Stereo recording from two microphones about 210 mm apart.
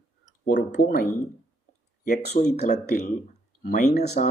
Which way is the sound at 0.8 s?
50° left (ahead or behind).